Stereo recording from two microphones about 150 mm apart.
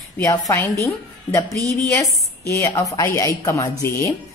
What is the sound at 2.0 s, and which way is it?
A woman's voice, 20° left (ahead or behind).